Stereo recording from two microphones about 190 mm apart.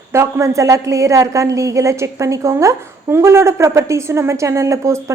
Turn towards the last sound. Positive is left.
turn(degrees=-15)  # may be behind; listen again after turning